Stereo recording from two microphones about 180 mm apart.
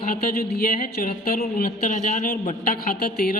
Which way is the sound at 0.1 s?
55° left (ahead or behind).